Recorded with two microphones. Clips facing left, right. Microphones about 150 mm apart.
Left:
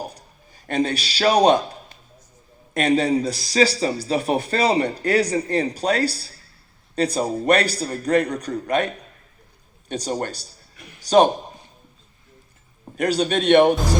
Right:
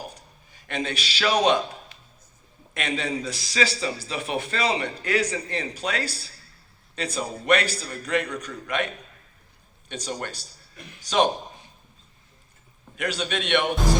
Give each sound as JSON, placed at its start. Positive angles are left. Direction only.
{"t": 0.1, "sound": "a sound", "side_deg": 35}
{"t": 2.7, "sound": "a man's voice", "side_deg": 35}
{"t": 9.9, "sound": "a man's voice", "side_deg": 40}
{"t": 13.0, "sound": "a man's voice", "side_deg": 35}